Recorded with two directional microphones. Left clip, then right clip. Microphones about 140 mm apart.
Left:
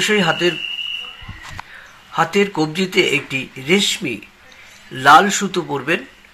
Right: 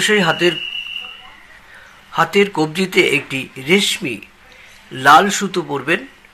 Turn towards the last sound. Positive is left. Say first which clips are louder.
# right 1 dB
turn(degrees=-5)  # may be behind; listen again after turning